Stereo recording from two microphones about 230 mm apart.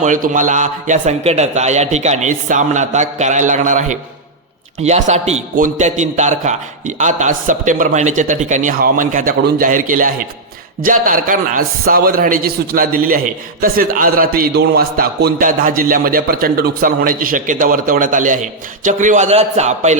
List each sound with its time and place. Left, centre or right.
0.0 s a man's voice: right